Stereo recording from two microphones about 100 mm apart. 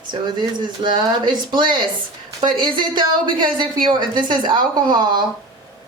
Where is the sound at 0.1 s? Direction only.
50° right (ahead or behind).